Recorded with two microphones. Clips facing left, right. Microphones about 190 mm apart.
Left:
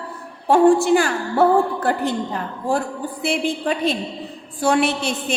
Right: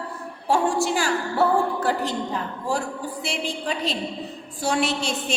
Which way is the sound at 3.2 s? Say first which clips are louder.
Left 8 dB; 55° left (ahead or behind).